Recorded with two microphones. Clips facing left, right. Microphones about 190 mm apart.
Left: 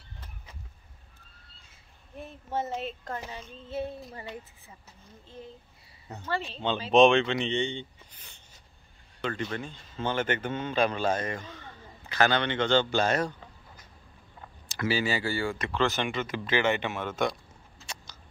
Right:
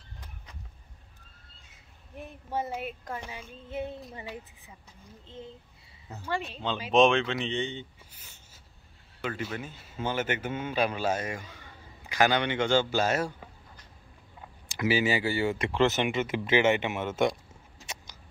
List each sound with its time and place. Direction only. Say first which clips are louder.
2.1 s speech: left 1 dB; 15° right (ahead or behind)
5.2 s speech: right 1 dB; 20° right (ahead or behind)
6.0 s speech: even; 5° right (ahead or behind)
14.7 s speech: right 2 dB; 15° right (ahead or behind)